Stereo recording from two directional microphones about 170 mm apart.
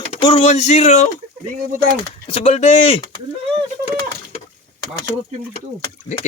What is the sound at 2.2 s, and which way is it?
Speech, 35° left (ahead or behind).